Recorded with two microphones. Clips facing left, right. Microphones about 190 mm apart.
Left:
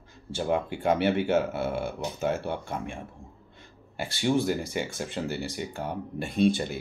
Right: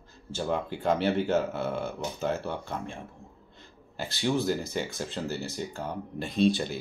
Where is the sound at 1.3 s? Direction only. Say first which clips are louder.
Left 2 dB; 10° left (ahead or behind).